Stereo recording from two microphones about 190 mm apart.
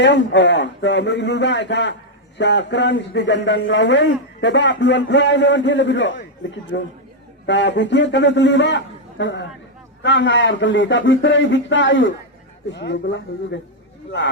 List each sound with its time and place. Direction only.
0.0 s a man's voice: 70° left (ahead or behind)